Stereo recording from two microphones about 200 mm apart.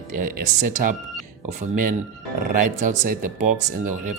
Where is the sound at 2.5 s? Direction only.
45° right (ahead or behind).